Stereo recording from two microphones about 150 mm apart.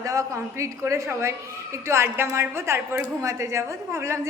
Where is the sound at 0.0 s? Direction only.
20° right (ahead or behind).